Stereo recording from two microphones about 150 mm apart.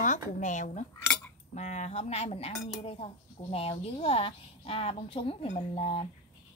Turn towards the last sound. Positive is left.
turn(degrees=45)  # may be behind; listen again after turning